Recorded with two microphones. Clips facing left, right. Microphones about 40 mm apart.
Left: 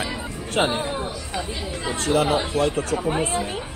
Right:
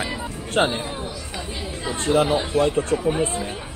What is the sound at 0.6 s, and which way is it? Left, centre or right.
Speech, centre.